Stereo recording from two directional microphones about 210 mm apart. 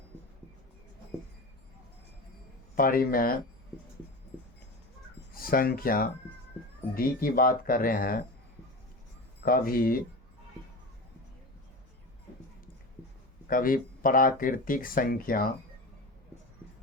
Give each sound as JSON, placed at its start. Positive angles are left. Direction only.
{"t": 2.7, "sound": "speech", "side_deg": 45}
{"t": 5.3, "sound": "speech", "side_deg": 45}
{"t": 9.4, "sound": "speech", "side_deg": 45}
{"t": 13.5, "sound": "speech", "side_deg": 40}